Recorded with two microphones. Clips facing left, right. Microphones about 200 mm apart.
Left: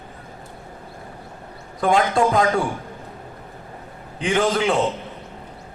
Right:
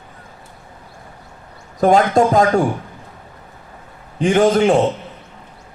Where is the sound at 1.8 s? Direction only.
45° right (ahead or behind).